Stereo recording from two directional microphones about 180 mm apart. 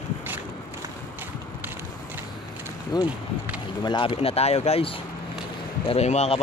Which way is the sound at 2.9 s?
20° left (ahead or behind).